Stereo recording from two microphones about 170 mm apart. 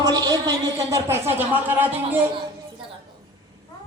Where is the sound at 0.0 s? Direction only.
25° right (ahead or behind).